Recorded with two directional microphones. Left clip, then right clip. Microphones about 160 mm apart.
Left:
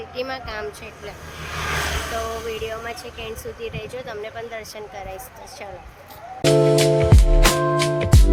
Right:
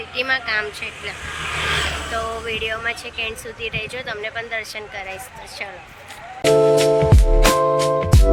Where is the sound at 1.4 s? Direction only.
40° right (ahead or behind).